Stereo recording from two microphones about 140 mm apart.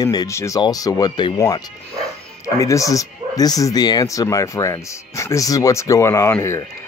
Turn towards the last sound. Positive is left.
turn(degrees=20)  # may be behind; listen again after turning